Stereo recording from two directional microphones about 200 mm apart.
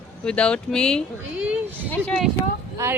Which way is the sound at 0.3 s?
5° left (ahead or behind).